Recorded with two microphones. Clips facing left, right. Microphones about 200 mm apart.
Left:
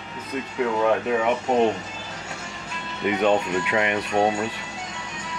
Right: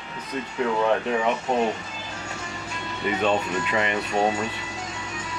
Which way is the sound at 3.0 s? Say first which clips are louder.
Left 3 dB; 15° left (ahead or behind).